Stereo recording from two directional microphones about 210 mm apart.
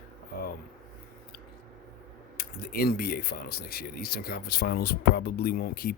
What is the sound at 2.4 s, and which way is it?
Speech, 45° left (ahead or behind).